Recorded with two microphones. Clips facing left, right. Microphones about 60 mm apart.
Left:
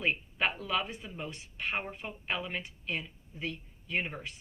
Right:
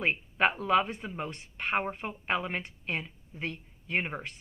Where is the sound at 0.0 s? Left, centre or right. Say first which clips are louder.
Right 4 dB; right.